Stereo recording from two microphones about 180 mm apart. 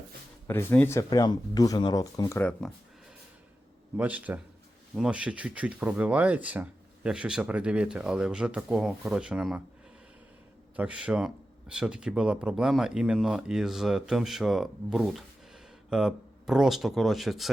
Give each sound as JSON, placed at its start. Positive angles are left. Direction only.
{"t": 0.4, "sound": "speech", "side_deg": 10}
{"t": 2.4, "sound": "speech", "side_deg": 5}
{"t": 3.9, "sound": "speech", "side_deg": -10}
{"t": 10.8, "sound": "speech", "side_deg": -5}